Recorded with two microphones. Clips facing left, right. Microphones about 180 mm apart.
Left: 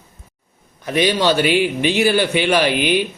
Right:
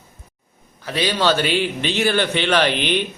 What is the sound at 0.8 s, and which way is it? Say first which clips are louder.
A man's voice: left 3 dB; 15° left (ahead or behind).